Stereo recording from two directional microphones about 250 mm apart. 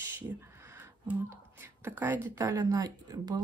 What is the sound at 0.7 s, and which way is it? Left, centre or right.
A woman's voice, centre.